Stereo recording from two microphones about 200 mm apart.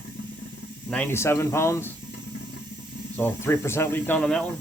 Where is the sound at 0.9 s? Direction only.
10° left (ahead or behind).